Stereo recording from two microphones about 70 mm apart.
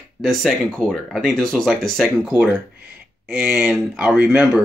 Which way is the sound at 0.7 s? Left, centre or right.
Centre.